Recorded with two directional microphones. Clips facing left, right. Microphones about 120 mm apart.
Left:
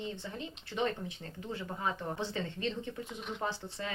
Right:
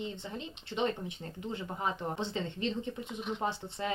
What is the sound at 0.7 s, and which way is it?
Speech, 20° right (ahead or behind).